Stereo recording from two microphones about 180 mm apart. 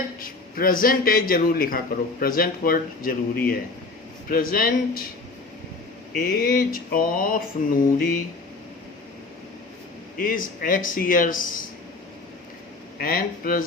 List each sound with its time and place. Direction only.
0.2 s a man's voice: 50° left (ahead or behind)
6.1 s a man's voice: 55° left (ahead or behind)
10.2 s a man's voice: 50° left (ahead or behind)
13.0 s a man's voice: 55° left (ahead or behind)